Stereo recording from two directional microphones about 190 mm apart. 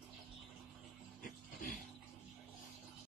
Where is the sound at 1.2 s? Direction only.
45° left (ahead or behind).